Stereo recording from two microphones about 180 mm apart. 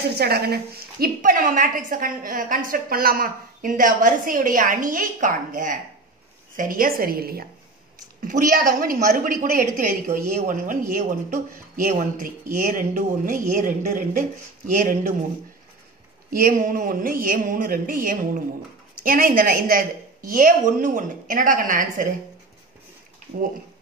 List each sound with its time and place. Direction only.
0.2 s a woman's voice: 60° right (ahead or behind)
16.3 s a woman's voice: 50° right (ahead or behind)